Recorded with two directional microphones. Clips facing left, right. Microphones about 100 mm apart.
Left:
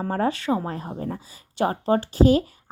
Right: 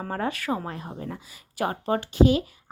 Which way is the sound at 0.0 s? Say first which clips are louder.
Left 5 dB; 35° left (ahead or behind).